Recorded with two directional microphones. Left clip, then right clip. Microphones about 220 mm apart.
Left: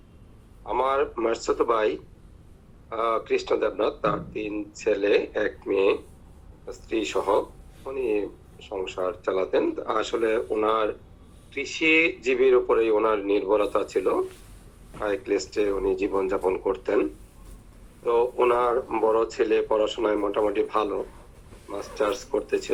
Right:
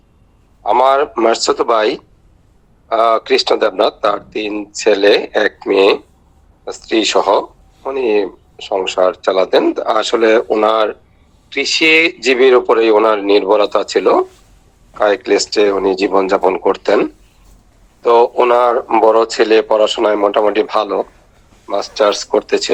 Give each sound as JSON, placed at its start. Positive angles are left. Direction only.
{"t": 0.6, "sound": "a man's voice", "side_deg": -50}